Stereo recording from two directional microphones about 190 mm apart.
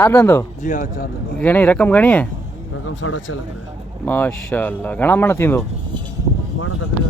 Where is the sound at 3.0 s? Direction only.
85° left.